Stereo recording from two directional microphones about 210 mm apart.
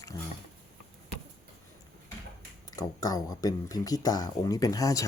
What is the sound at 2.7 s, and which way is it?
Speech, 15° left (ahead or behind).